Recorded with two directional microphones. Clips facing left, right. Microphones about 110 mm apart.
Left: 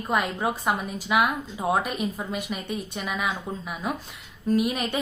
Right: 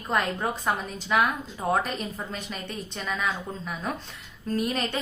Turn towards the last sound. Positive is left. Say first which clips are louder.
# left 4 dB
turn(degrees=10)  # may be behind; listen again after turning